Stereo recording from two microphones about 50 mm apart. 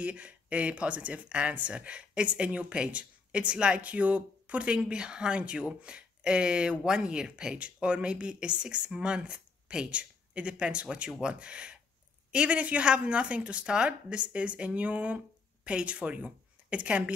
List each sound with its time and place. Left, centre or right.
0.0 s speech: right
11.1 s speech: centre
11.3 s speech: right